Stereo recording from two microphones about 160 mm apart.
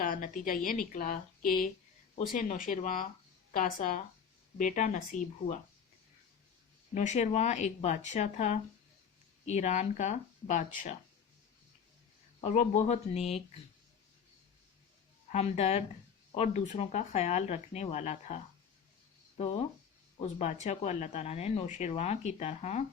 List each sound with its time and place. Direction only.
0.0 s a woman's voice: 60° left (ahead or behind)
6.9 s speech: 45° left (ahead or behind)
12.4 s speech: 45° left (ahead or behind)
15.3 s speech: 45° left (ahead or behind)
20.1 s speech: 45° left (ahead or behind)